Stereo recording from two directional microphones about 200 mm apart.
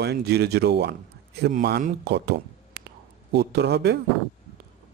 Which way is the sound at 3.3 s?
55° right (ahead or behind).